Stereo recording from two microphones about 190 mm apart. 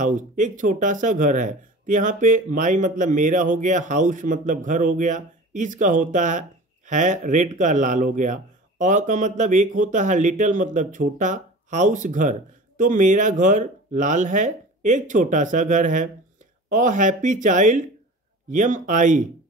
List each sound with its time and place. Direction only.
0.0 s speech: 40° right (ahead or behind)